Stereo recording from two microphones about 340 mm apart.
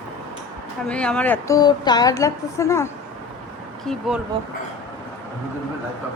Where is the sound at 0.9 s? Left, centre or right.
Centre.